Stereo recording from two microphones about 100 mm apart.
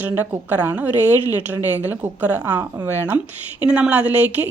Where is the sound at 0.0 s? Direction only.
20° right (ahead or behind).